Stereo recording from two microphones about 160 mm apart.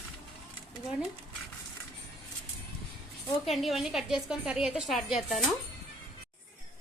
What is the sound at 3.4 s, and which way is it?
A woman's voice, centre (ahead or behind).